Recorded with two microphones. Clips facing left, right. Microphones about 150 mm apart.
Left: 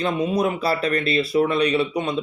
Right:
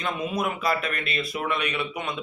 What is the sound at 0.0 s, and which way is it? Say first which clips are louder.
A man's voice: left 6 dB; 35° left (ahead or behind).